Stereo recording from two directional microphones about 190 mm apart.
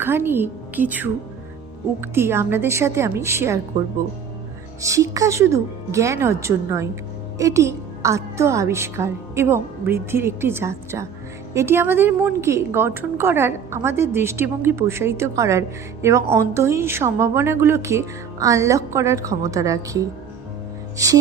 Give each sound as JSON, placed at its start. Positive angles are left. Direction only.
{"t": 0.0, "sound": "a woman's voice", "side_deg": -10}
{"t": 4.8, "sound": "a woman's voice", "side_deg": -15}